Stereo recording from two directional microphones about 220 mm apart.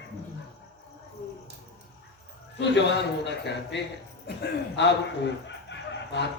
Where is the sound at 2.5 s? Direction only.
50° left (ahead or behind).